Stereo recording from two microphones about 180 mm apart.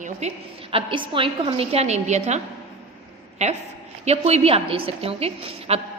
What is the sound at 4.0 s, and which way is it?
A woman's voice, 35° right (ahead or behind).